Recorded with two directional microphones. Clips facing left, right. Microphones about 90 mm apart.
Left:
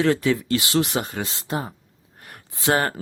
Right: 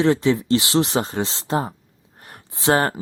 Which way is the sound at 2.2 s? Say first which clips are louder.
Right 1 dB; 20° right (ahead or behind).